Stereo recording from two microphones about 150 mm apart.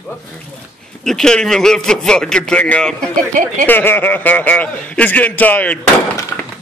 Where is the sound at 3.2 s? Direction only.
60° right (ahead or behind).